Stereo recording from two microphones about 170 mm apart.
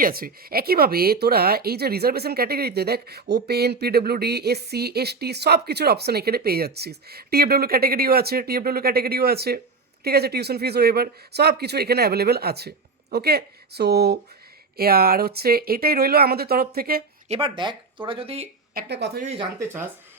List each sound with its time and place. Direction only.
0.0 s speech: 60° right (ahead or behind)
14.8 s speech: 60° right (ahead or behind)
17.2 s speech: 35° right (ahead or behind)
18.7 s speech: 70° right (ahead or behind)
19.2 s speech: 35° right (ahead or behind)
19.5 s speech: 15° right (ahead or behind)